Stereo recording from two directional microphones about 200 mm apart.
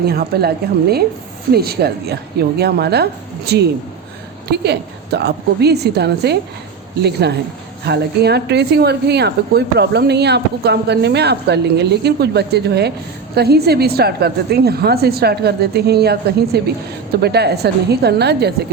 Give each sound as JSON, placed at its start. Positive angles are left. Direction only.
{"t": 0.0, "sound": "a woman's voice", "side_deg": -50}